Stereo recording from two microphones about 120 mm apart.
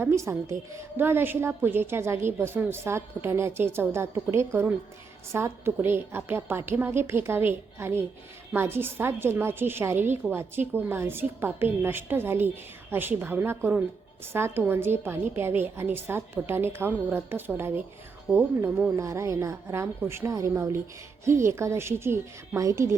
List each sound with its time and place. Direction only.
0.0 s a woman's voice: 20° right (ahead or behind)
18.9 s a woman's voice: 25° right (ahead or behind)